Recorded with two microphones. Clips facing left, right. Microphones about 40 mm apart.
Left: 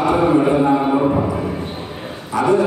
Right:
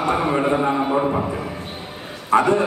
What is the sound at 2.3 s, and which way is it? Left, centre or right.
Speech, right.